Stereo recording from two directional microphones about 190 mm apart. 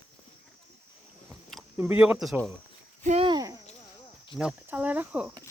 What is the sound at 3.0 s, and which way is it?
Speech, 30° right (ahead or behind).